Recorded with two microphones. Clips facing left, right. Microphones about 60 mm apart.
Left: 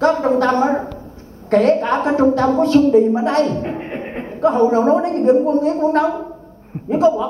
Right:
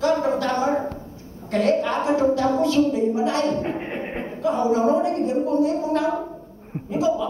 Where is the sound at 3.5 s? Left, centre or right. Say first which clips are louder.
Left 2 dB; centre.